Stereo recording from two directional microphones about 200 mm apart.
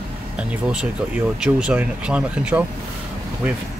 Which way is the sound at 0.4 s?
5° right (ahead or behind).